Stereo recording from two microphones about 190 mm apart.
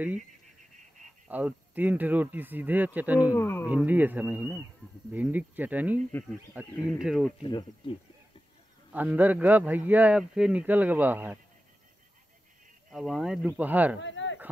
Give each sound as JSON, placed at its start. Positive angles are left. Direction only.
{"t": 1.3, "sound": "speech", "side_deg": -10}
{"t": 3.3, "sound": "speech", "side_deg": 10}
{"t": 3.6, "sound": "speech", "side_deg": -10}
{"t": 7.4, "sound": "speech", "side_deg": 25}
{"t": 8.9, "sound": "speech", "side_deg": -10}
{"t": 12.9, "sound": "speech", "side_deg": 0}
{"t": 13.9, "sound": "speech", "side_deg": 80}